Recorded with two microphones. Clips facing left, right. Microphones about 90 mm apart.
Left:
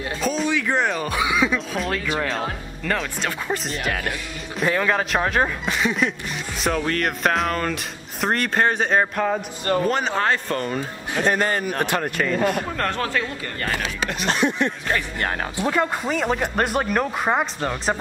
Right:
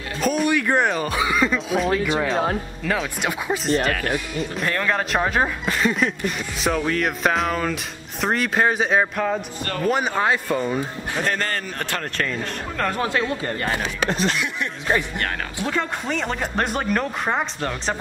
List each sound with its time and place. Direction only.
0.2 s music: 5° right (ahead or behind)
0.9 s chuckle: centre (ahead or behind)
1.7 s music: 5° right (ahead or behind)
2.1 s speech: centre (ahead or behind)
9.8 s speech: 10° right (ahead or behind)
11.3 s speech: 15° left (ahead or behind); by 13.0 s centre (ahead or behind)
13.0 s speech: 20° right (ahead or behind)
14.2 s a sound: 35° left (ahead or behind)
15.6 s speech: 10° left (ahead or behind)